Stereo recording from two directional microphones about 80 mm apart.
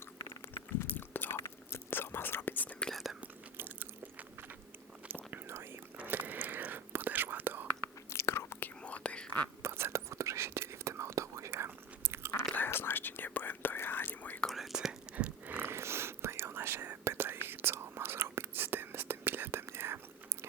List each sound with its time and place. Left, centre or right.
0.5 s chewing: left
1.4 s whispering: left
3.2 s biting: right
5.3 s whispering: right
8.1 s chewing: left
8.8 s whispering: centre
9.6 s whispering: right
12.5 s whispering: left
14.4 s whispering: centre
15.1 s whispering: centre